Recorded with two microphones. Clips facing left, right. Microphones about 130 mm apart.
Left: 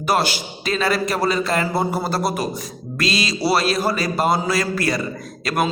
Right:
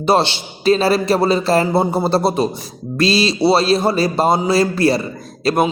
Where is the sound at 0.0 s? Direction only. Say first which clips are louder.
Right 5 dB; 25° right (ahead or behind).